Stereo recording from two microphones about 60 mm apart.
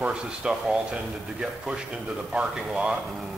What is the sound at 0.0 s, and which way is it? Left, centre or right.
Speech, centre.